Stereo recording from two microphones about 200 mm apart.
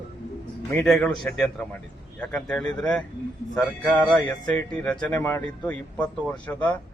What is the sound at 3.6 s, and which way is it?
Speech, 20° left (ahead or behind).